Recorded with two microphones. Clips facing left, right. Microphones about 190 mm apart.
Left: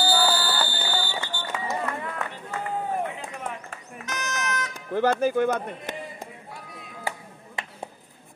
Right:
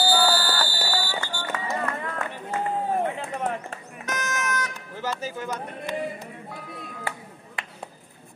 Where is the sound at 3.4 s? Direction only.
45° right (ahead or behind).